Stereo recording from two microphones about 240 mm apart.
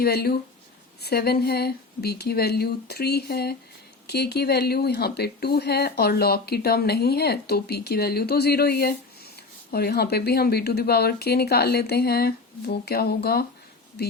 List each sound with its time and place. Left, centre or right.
0.0 s speech: left